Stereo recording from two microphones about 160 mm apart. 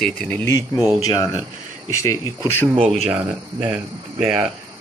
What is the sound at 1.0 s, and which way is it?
Speech, 20° left (ahead or behind).